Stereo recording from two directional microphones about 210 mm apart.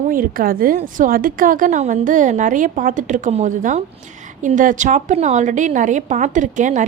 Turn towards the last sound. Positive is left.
turn(degrees=-35)  # may be behind; listen again after turning